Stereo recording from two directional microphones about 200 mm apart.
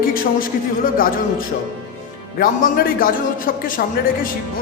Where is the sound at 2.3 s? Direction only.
45° left (ahead or behind).